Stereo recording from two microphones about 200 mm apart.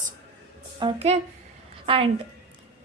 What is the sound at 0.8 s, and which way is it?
Speech, 25° right (ahead or behind).